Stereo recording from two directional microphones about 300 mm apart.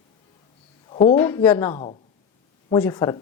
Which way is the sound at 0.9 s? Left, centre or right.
Centre.